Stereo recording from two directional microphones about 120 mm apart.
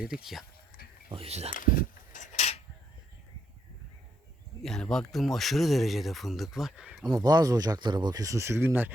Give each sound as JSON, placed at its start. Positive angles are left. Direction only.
{"t": 0.0, "sound": "speech", "side_deg": -5}
{"t": 1.1, "sound": "speech", "side_deg": -55}
{"t": 2.1, "sound": "a sound", "side_deg": 80}
{"t": 4.6, "sound": "speech", "side_deg": 5}
{"t": 7.2, "sound": "speech", "side_deg": -30}